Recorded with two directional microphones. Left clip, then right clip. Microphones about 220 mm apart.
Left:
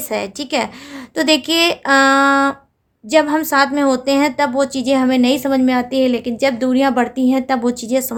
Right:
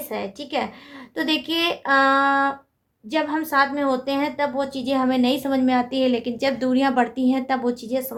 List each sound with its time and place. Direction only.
0.1 s a woman's voice: 45° left (ahead or behind)